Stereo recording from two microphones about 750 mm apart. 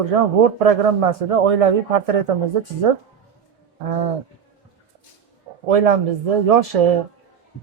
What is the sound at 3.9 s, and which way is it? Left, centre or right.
Speech, right.